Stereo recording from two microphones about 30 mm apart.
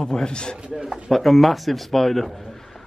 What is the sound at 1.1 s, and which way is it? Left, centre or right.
A man's voice, centre.